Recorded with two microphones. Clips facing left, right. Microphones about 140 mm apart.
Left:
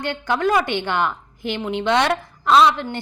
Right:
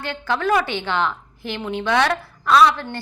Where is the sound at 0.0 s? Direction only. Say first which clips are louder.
Left 2 dB; 15° left (ahead or behind).